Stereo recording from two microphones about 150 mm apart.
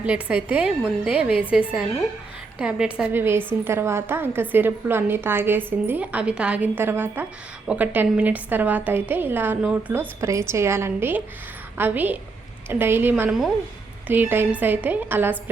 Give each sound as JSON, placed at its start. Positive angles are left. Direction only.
{"t": 0.0, "sound": "a woman's voice", "side_deg": -10}